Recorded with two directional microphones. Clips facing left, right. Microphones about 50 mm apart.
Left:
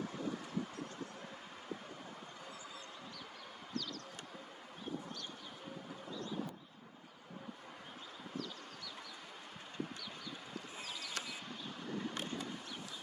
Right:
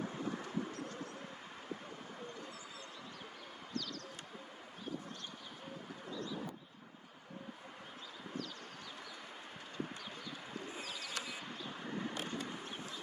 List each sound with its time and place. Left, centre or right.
0.0 s vehicle: right
10.8 s bird: centre
11.9 s vehicle: right